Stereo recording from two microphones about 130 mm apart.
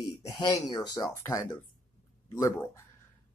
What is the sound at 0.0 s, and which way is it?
Speech, 25° left (ahead or behind).